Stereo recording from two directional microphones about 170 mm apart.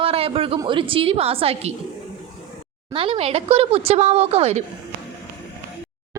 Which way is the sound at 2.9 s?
35° right (ahead or behind).